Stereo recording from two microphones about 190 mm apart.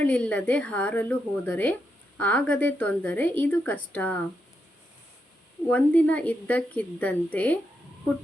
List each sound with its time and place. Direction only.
0.0 s a woman's voice: 5° left (ahead or behind)
5.7 s a woman's voice: 10° left (ahead or behind)